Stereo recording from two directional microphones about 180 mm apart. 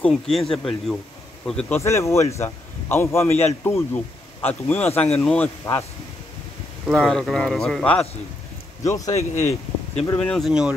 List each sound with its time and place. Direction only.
0.0 s speech: centre (ahead or behind)
1.8 s a man's voice: 15° left (ahead or behind)
6.9 s speech: 5° left (ahead or behind)
8.8 s a man's voice: 20° left (ahead or behind)
9.1 s speech: 40° left (ahead or behind)
10.1 s speech: 5° left (ahead or behind)